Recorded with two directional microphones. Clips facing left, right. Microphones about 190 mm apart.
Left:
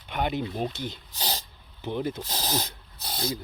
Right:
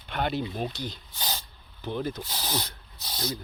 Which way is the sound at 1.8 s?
20° left (ahead or behind).